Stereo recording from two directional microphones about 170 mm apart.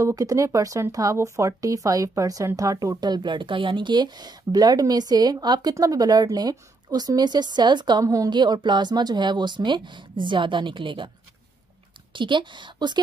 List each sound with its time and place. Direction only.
0.0 s speech: 20° right (ahead or behind)
12.1 s speech: 30° right (ahead or behind)